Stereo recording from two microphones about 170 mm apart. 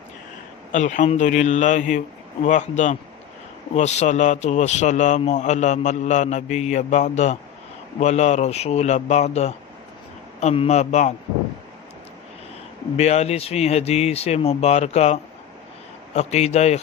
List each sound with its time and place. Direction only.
0.7 s a man's voice: 45° left (ahead or behind)
13.0 s speech: 40° left (ahead or behind)